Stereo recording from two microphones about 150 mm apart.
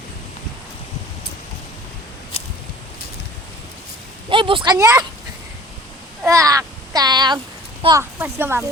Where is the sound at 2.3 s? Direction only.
45° left (ahead or behind).